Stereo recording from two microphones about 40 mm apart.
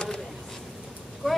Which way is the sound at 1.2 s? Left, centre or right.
Centre.